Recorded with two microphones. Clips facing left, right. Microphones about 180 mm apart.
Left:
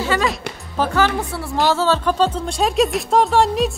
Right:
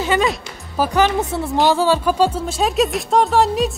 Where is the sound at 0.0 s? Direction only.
20° right (ahead or behind).